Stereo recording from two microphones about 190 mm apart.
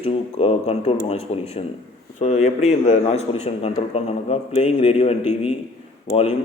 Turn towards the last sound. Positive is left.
turn(degrees=30)  # may be behind; listen again after turning